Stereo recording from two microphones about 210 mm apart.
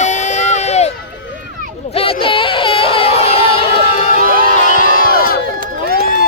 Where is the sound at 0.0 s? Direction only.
35° left (ahead or behind).